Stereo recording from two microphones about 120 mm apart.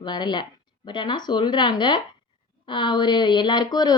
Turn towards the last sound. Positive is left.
turn(degrees=35)  # may be behind; listen again after turning